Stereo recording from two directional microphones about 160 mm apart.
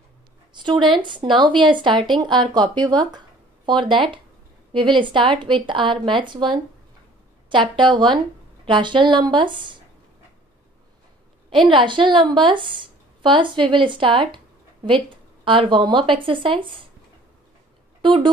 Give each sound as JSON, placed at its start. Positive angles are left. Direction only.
{"t": 0.6, "sound": "a woman's voice", "side_deg": -30}
{"t": 11.5, "sound": "a woman's voice", "side_deg": -30}
{"t": 15.4, "sound": "a woman's voice", "side_deg": -30}
{"t": 18.0, "sound": "a woman's voice", "side_deg": -30}